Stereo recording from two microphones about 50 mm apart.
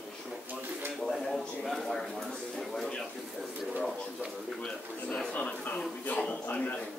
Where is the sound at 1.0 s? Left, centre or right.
Centre.